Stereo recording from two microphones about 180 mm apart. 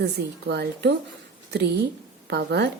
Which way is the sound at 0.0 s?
65° right (ahead or behind).